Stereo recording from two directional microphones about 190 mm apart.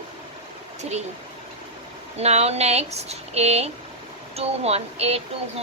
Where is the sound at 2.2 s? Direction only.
35° right (ahead or behind).